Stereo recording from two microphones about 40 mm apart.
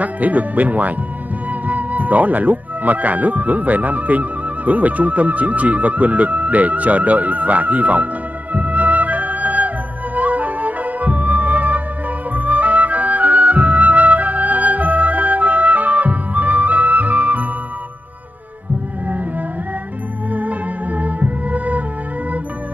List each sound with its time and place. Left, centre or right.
0.0 s speech: right
8.5 s music: right
20.3 s music: right